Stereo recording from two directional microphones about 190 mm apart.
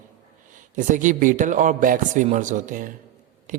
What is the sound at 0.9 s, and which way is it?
Speech, 45° right (ahead or behind).